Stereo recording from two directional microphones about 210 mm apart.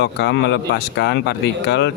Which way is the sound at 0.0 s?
55° left (ahead or behind).